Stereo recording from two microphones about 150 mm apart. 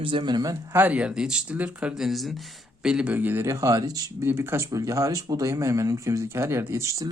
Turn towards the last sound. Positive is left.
turn(degrees=-20)  # may be behind; listen again after turning